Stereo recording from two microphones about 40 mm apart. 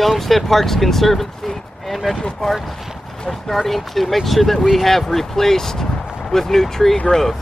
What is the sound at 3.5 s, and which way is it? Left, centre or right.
Speech, centre.